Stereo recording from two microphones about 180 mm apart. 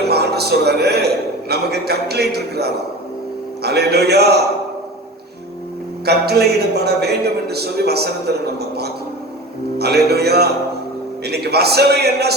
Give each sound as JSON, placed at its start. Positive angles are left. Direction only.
{"t": 0.1, "sound": "a man's voice", "side_deg": -65}
{"t": 6.1, "sound": "a man's voice", "side_deg": -65}